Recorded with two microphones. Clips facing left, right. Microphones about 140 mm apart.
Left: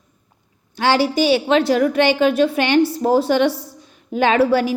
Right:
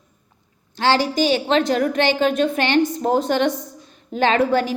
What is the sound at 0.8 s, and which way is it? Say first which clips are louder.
A woman's voice: left 2 dB; 10° left (ahead or behind).